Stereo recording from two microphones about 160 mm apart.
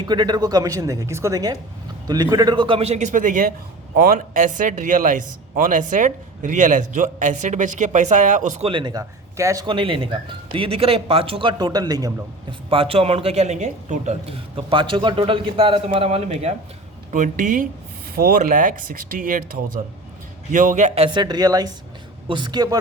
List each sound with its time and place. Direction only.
0.1 s speech: 25° right (ahead or behind); by 8.6 s 50° right (ahead or behind)
8.6 s speech: 30° right (ahead or behind)
9.6 s speech: 30° right (ahead or behind)
12.7 s speech: 35° right (ahead or behind); by 19.5 s 60° right (ahead or behind)
20.5 s speech: 55° right (ahead or behind); by 22.8 s 25° right (ahead or behind)